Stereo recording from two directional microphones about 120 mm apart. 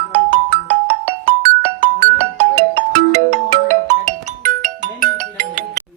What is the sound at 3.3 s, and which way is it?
Ringtone, 70° right (ahead or behind).